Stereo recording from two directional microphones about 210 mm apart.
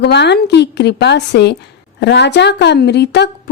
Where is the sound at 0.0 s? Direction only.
55° left (ahead or behind).